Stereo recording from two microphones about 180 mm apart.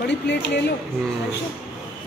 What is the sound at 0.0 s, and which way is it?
Speech, 75° left (ahead or behind).